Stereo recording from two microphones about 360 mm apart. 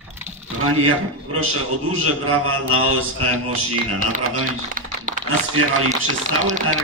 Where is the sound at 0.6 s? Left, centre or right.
Right.